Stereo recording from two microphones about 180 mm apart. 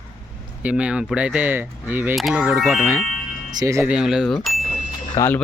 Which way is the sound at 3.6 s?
15° right (ahead or behind).